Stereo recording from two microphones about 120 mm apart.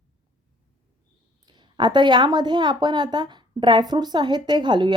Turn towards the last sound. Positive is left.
turn(degrees=-40)  # may be behind; listen again after turning